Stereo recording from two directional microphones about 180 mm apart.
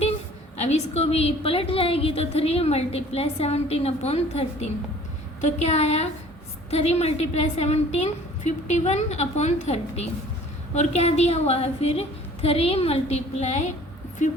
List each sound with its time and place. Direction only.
0.6 s a woman's voice: 35° left (ahead or behind)